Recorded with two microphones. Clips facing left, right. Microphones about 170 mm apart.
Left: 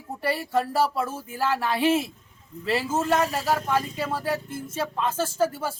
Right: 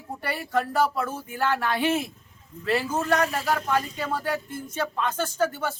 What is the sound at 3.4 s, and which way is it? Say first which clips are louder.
A woman's voice: left 1 dB; centre (ahead or behind).